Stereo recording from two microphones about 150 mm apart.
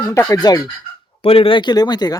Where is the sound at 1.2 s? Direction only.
40° left (ahead or behind).